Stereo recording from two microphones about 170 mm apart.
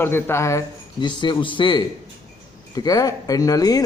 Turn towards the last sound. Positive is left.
turn(degrees=20)  # may be behind; listen again after turning